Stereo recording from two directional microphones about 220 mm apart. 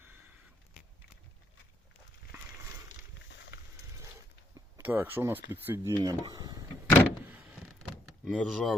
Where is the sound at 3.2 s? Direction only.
50° left (ahead or behind).